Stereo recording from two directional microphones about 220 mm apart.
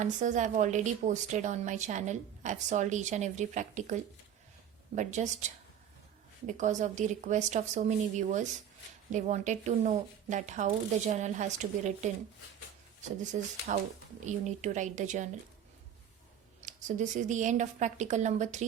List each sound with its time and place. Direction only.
0.0 s a woman's voice: 35° right (ahead or behind)
6.5 s a woman's voice: 35° right (ahead or behind)
13.3 s a woman's voice: 35° right (ahead or behind)
16.6 s a woman's voice: 35° right (ahead or behind)